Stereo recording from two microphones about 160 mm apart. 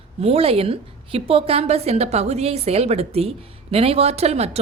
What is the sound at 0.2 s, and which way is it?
A woman's voice, 40° right (ahead or behind).